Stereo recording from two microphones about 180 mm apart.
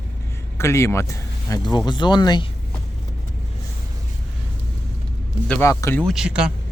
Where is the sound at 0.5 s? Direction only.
15° left (ahead or behind).